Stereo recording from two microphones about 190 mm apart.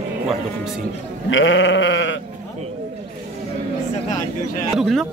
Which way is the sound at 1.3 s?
80° left.